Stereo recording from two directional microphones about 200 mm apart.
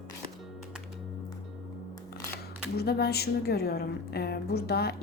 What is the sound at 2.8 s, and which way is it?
A woman's voice, 50° left (ahead or behind).